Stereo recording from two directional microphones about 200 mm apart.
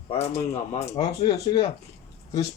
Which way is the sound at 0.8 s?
20° left (ahead or behind).